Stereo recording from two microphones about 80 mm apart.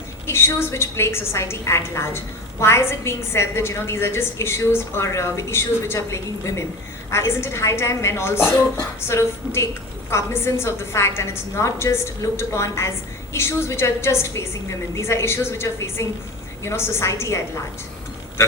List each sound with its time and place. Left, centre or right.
0.3 s a woman's voice: left